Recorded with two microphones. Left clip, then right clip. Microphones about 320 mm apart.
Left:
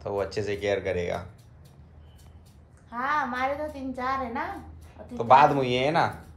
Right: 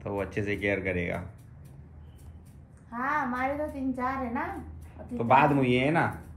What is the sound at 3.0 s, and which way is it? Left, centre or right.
Speech, centre.